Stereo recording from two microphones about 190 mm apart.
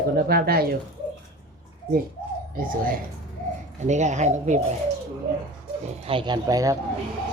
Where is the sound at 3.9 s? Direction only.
40° right (ahead or behind).